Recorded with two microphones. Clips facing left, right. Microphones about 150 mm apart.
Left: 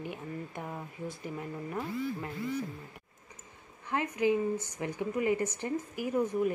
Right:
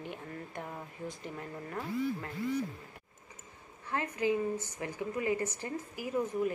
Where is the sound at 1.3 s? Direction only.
15° left (ahead or behind).